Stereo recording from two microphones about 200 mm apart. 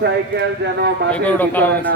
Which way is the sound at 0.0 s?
60° right (ahead or behind).